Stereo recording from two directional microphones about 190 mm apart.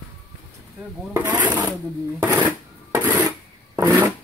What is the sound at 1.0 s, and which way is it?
Speech, 10° right (ahead or behind).